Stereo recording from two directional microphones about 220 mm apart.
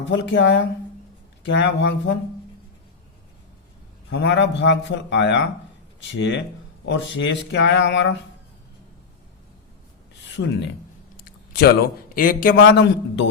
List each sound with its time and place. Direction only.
0.1 s speech: 60° left (ahead or behind)
4.1 s speech: 50° left (ahead or behind)
10.4 s speech: 90° left
11.2 s a man's voice: 40° left (ahead or behind)